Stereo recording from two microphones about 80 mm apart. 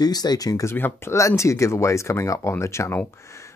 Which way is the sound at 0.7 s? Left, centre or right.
Left.